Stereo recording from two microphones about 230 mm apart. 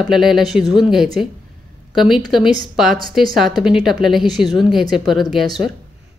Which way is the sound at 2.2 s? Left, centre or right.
Centre.